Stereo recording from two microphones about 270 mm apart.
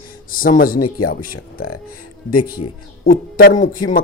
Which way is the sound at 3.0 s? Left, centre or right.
Left.